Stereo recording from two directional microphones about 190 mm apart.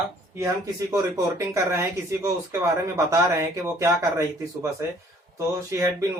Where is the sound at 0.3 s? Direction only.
15° right (ahead or behind).